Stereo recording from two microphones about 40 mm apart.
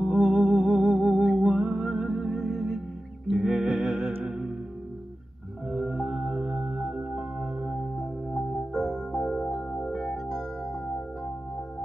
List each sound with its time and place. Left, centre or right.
0.0 s music: centre
1.3 s music: centre
2.3 s music: centre
3.3 s music: centre
5.7 s music: centre
8.5 s music: centre